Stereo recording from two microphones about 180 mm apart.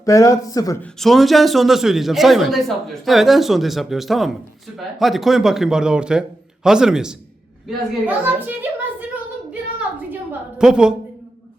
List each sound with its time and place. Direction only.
0.0 s speech: 15° left (ahead or behind)
0.8 s a man's voice: centre (ahead or behind)
9.0 s a sound: 10° right (ahead or behind)
10.6 s a man's voice: 5° right (ahead or behind)